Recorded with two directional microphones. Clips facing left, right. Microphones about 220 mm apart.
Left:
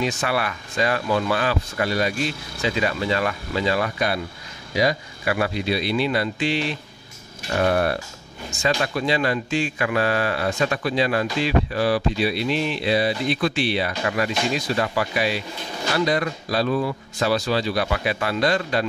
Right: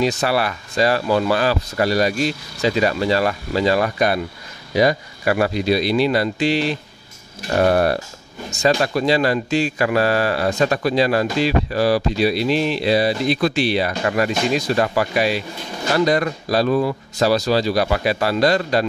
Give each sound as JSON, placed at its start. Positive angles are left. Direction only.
{"t": 0.0, "sound": "a man's voice", "side_deg": -35}
{"t": 7.6, "sound": "a man's voice", "side_deg": -40}